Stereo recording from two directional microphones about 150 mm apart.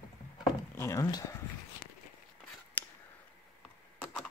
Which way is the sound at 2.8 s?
10° left (ahead or behind).